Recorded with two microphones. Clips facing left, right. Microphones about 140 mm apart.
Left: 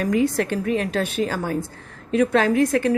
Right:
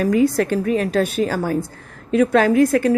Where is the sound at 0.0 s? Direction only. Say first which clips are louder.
Right 4 dB; 35° right (ahead or behind).